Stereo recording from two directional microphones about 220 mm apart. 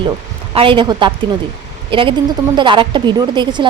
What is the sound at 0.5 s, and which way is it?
A woman's voice, 25° right (ahead or behind).